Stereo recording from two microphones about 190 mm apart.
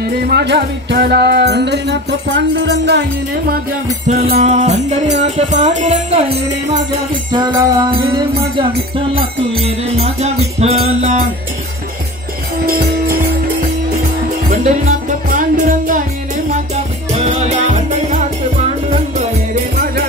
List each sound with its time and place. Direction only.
0.3 s music: 60° right (ahead or behind)
4.4 s music: 35° right (ahead or behind)
12.6 s jingle bell: 50° right (ahead or behind)
14.5 s music: 40° right (ahead or behind)